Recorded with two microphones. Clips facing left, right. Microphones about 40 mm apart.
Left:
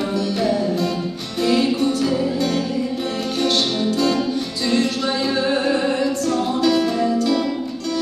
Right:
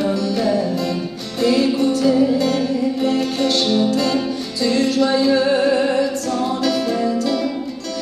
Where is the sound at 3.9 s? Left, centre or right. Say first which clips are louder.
Right 1 dB; right.